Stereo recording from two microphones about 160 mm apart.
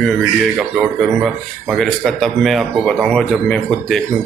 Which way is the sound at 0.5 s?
5° right (ahead or behind).